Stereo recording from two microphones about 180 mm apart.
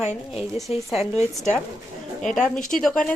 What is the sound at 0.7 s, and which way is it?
Speech, 35° left (ahead or behind).